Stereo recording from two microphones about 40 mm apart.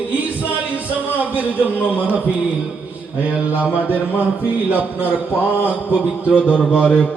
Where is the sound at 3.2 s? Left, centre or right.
Right.